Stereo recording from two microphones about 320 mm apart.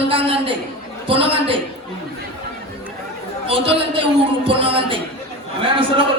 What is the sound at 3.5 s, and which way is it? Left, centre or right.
A man's voice, centre.